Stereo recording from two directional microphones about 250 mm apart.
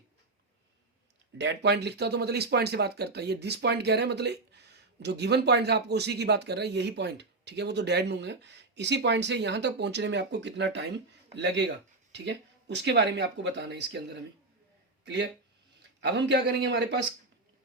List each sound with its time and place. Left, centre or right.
1.4 s speech: right